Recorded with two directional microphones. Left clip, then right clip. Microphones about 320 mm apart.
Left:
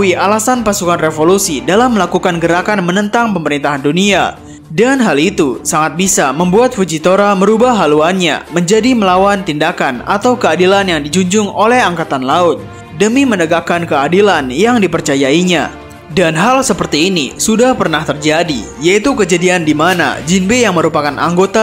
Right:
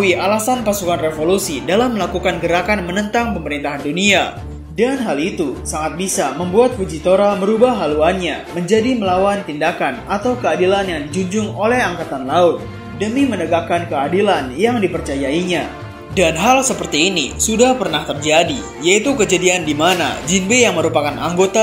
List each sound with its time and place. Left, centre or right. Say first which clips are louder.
0.0 s speech: left 4 dB; left
16.9 s speech: left 2 dB; left
17.5 s speech: left 4 dB; left